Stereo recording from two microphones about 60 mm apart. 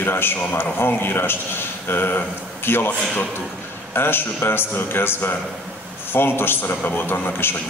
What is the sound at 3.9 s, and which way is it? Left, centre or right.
A man's voice, left.